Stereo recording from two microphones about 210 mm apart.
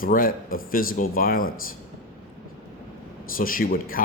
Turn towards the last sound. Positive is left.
turn(degrees=45)  # may be behind; listen again after turning